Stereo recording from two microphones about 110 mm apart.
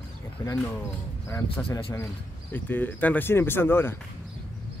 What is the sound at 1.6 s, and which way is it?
Speech, 15° left (ahead or behind).